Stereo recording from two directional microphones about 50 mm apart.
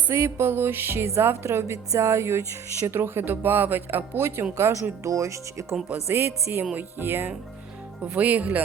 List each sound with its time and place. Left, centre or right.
0.1 s speech: right
1.0 s a woman's voice: right
2.8 s speech: right
4.5 s speech: right
6.1 s speech: right
6.7 s speech: right
8.0 s speech: right